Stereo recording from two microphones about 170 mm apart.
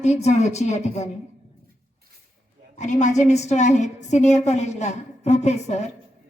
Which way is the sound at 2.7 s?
45° left (ahead or behind).